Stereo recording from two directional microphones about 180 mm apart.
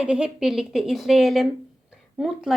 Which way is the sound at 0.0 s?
5° right (ahead or behind).